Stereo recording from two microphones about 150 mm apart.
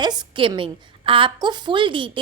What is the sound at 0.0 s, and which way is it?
A woman's voice, 30° right (ahead or behind).